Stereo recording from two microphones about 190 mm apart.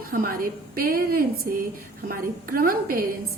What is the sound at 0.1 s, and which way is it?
A woman's voice, 50° right (ahead or behind).